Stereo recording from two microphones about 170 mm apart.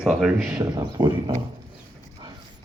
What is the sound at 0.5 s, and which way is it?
Speech, 25° right (ahead or behind).